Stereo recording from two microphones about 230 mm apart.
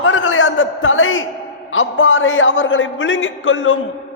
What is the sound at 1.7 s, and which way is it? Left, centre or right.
A man's voice, left.